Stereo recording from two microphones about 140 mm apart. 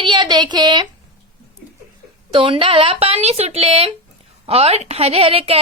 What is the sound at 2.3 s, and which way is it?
A woman's voice, 40° right (ahead or behind).